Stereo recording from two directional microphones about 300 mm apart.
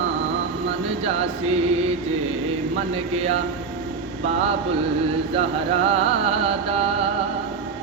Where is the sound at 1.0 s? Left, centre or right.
Right.